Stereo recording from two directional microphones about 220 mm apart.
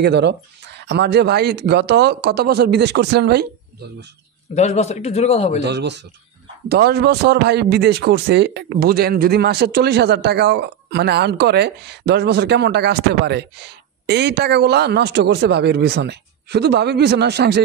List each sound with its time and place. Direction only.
0.0 s speech: 50° right (ahead or behind)
4.6 s a man's voice: 30° left (ahead or behind)
5.7 s speech: 50° right (ahead or behind)